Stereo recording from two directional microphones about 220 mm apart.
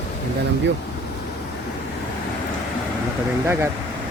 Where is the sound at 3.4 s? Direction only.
10° right (ahead or behind).